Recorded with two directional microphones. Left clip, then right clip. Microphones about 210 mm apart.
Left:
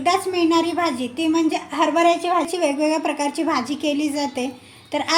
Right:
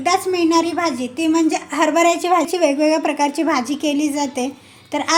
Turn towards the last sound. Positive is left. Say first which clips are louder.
# right 2 dB
turn(degrees=-20)  # may be behind; listen again after turning